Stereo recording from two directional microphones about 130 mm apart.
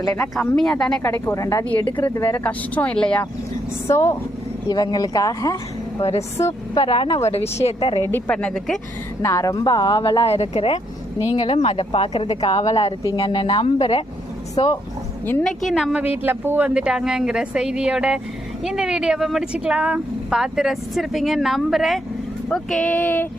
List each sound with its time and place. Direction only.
0.3 s speech: 5° left (ahead or behind)
1.0 s speech: 20° left (ahead or behind)
2.4 s speech: 10° left (ahead or behind)
3.8 s speech: 20° left (ahead or behind)
4.7 s speech: 30° left (ahead or behind)
6.0 s speech: 50° left (ahead or behind)
7.8 s speech: 35° left (ahead or behind)
8.0 s speech: 15° left (ahead or behind)
9.2 s speech: 25° left (ahead or behind); by 12.9 s 55° left (ahead or behind)
13.1 s speech: 40° left (ahead or behind)
14.6 s speech: 35° left (ahead or behind)
15.4 s speech: centre (ahead or behind); by 23.3 s 15° left (ahead or behind)